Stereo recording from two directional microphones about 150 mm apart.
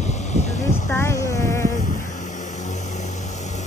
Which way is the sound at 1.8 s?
60° left (ahead or behind).